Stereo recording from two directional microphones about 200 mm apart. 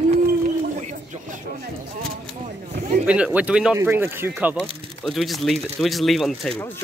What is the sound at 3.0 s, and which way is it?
Speech, 5° right (ahead or behind).